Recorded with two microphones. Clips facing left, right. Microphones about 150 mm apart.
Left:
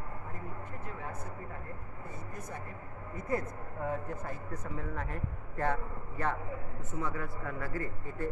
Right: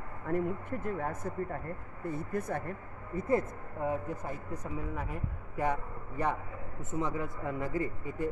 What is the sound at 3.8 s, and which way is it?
A man's voice, 15° right (ahead or behind).